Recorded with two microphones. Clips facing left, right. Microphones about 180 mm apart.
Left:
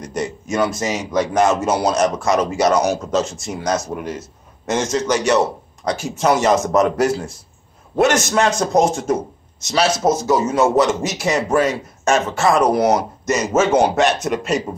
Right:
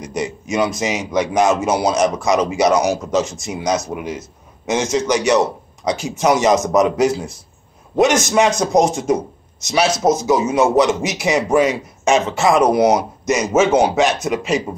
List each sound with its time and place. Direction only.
0.0 s a man's voice: 10° right (ahead or behind)